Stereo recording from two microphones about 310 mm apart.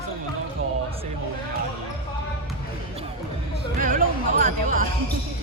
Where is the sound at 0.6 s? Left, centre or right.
Right.